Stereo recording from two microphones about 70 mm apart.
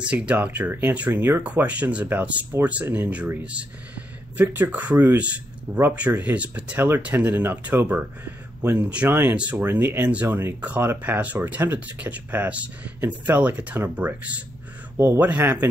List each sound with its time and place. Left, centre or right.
0.0 s speech: centre
0.7 s speech: right
0.9 s speech: right
4.4 s speech: right
9.1 s speech: right